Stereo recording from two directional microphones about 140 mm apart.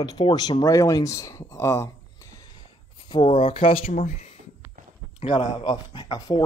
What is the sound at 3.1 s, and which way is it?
Speech, 45° left (ahead or behind).